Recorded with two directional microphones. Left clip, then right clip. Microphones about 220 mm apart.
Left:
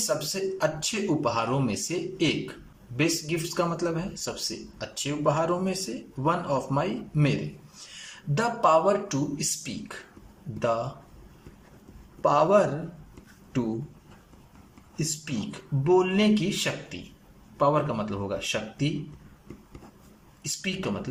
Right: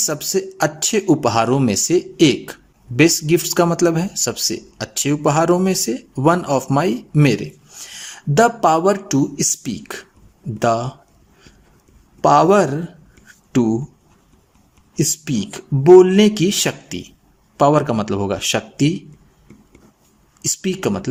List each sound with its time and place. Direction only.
0.0 s speech: 45° right (ahead or behind)
8.4 s speech: 50° right (ahead or behind)
12.2 s speech: 50° right (ahead or behind)
15.2 s speech: 50° right (ahead or behind)
20.4 s speech: 50° right (ahead or behind)